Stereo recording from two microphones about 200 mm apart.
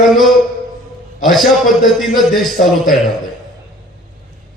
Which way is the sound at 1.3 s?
Centre (ahead or behind).